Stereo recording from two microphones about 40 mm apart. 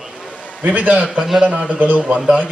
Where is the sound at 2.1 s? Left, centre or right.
Right.